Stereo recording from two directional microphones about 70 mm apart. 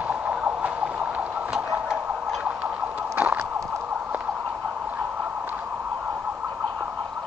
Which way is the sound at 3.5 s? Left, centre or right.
Right.